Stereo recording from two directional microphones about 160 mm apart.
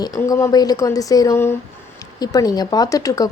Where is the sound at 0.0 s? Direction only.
20° left (ahead or behind).